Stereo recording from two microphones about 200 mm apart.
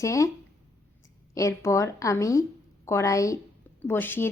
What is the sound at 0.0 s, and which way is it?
Speech, 15° left (ahead or behind).